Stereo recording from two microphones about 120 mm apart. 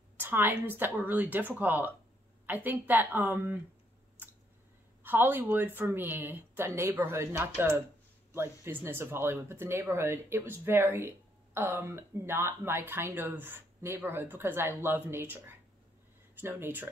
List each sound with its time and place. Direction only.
0.2 s speech: 15° right (ahead or behind)
5.0 s speech: 15° right (ahead or behind)